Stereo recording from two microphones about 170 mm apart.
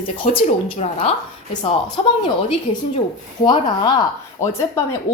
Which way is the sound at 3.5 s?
25° left (ahead or behind).